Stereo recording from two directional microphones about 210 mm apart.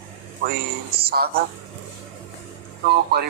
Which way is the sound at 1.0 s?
50° right (ahead or behind).